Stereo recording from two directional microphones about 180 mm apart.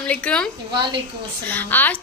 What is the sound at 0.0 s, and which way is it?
Speech, 5° left (ahead or behind).